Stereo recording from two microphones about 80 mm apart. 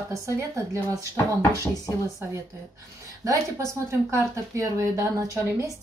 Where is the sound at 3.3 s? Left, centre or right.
Right.